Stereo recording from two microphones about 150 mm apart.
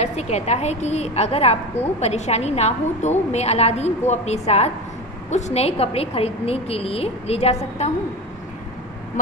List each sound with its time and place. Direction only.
0.0 s a woman's voice: 45° left (ahead or behind)